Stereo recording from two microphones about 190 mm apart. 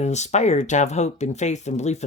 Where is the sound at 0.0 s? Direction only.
35° left (ahead or behind).